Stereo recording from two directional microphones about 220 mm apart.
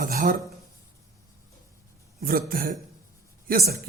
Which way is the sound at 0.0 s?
40° right (ahead or behind).